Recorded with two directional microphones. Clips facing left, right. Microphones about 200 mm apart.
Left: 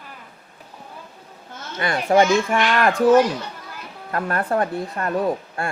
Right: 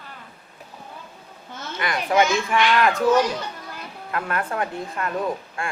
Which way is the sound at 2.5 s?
45° left (ahead or behind).